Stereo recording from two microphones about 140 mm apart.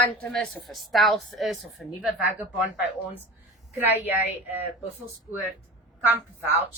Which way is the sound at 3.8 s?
15° right (ahead or behind).